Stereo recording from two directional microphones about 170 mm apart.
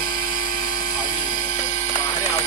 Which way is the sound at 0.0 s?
25° left (ahead or behind).